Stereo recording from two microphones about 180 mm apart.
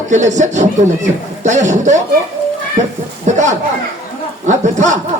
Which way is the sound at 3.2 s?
40° right (ahead or behind).